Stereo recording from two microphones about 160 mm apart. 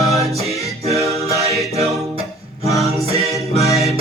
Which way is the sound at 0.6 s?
40° right (ahead or behind).